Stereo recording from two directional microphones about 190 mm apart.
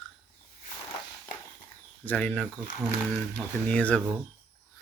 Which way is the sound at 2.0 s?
10° left (ahead or behind).